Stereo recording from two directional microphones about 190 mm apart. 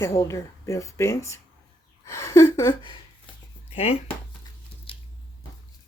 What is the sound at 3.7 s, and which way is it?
Speech, 30° left (ahead or behind).